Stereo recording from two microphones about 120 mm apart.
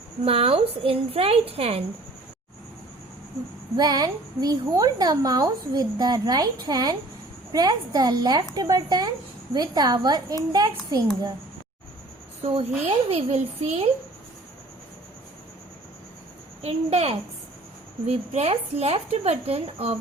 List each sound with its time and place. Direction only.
0.3 s a woman's voice: 55° right (ahead or behind)
3.8 s a woman's voice: 35° right (ahead or behind)
12.4 s speech: 55° right (ahead or behind)
16.6 s speech: 60° right (ahead or behind)